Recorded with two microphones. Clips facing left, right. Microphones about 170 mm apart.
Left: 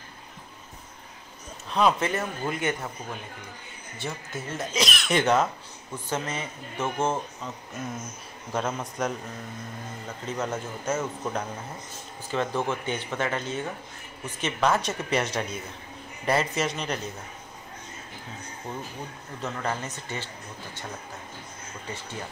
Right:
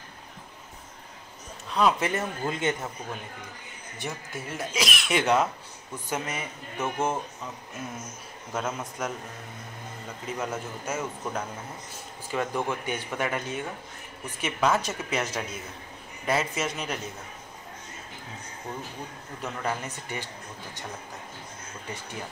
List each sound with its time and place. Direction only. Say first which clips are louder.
1.7 s a man's voice: left 1 dB; centre (ahead or behind)
2.0 s speech: even; 20° right (ahead or behind)
4.0 s speech: left 1 dB; 10° right (ahead or behind)
10.2 s speech: left 2 dB; 10° right (ahead or behind)
19.4 s speech: left 1 dB; 10° right (ahead or behind)